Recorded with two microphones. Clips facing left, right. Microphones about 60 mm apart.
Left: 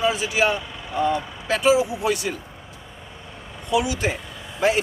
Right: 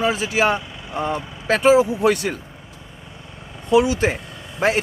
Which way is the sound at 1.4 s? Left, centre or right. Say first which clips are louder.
Right 4 dB; right.